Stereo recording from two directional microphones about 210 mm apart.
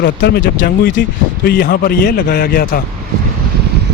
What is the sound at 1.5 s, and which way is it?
A man's voice, 45° left (ahead or behind).